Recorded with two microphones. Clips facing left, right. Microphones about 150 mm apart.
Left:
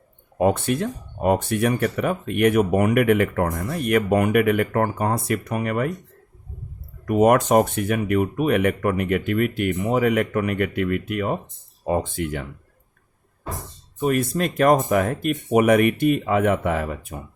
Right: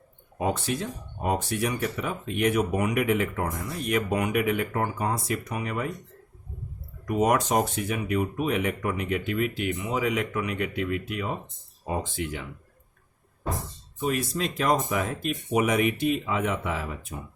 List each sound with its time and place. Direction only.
0.3 s speech: 55° left (ahead or behind)
7.0 s speech: 55° left (ahead or behind)
14.0 s speech: 50° left (ahead or behind)